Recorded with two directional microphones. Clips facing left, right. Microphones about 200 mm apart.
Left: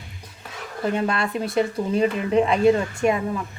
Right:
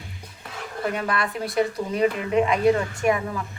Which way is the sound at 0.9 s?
25° left (ahead or behind).